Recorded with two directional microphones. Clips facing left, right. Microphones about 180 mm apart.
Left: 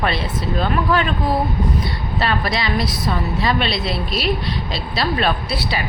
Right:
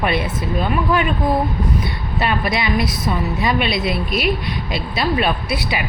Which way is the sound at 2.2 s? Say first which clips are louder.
Right 1 dB; 15° right (ahead or behind).